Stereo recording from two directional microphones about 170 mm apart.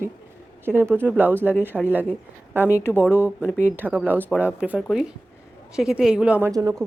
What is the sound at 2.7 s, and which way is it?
Speech, 15° left (ahead or behind).